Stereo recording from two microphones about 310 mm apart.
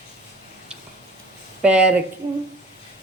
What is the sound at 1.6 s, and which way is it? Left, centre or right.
Speech, centre.